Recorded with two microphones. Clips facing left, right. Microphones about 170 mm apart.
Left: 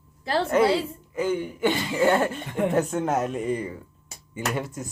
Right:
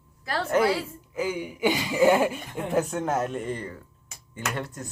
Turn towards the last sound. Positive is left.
turn(degrees=5)  # may be behind; listen again after turning